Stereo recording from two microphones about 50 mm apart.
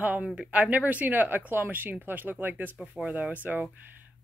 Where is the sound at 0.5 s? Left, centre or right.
Right.